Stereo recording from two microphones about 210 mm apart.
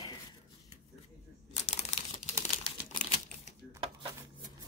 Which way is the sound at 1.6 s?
35° left (ahead or behind).